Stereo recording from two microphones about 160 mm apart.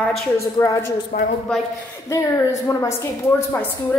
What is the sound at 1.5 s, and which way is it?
Speech, 5° left (ahead or behind).